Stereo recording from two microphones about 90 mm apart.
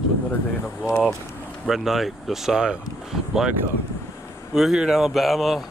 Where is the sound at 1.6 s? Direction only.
5° right (ahead or behind).